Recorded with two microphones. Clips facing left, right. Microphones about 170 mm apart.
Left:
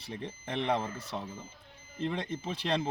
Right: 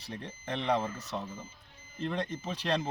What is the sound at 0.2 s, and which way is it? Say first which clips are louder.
Speech: left 2 dB; 20° left (ahead or behind).